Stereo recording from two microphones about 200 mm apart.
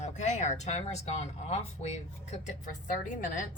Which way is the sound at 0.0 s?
35° left (ahead or behind).